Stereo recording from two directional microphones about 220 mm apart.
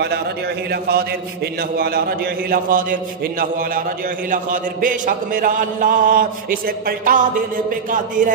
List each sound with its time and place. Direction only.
0.7 s a man's voice: 45° right (ahead or behind)